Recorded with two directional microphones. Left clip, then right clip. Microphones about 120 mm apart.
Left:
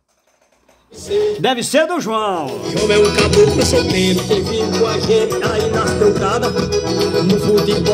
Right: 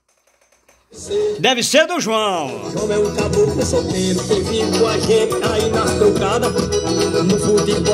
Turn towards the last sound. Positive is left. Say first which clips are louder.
# left 1 dB
turn(degrees=-25)  # may be behind; listen again after turning